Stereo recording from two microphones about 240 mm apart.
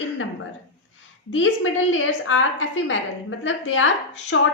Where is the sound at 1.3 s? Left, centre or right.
Left.